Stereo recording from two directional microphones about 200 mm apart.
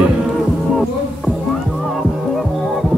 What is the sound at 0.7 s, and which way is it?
Music, centre (ahead or behind).